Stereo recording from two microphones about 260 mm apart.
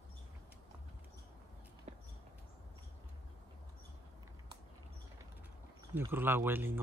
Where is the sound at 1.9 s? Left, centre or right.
Right.